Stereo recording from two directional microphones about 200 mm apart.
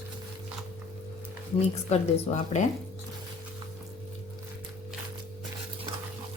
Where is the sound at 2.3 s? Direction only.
35° left (ahead or behind).